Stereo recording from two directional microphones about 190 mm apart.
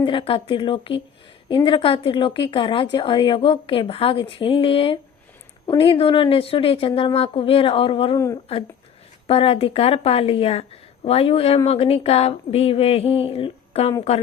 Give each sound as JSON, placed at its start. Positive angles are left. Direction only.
{"t": 0.0, "sound": "a woman's voice", "side_deg": 25}
{"t": 9.2, "sound": "speech", "side_deg": 30}